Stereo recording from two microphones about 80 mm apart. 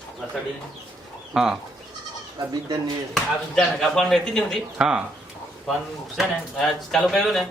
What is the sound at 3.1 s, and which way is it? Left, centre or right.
Speech, centre.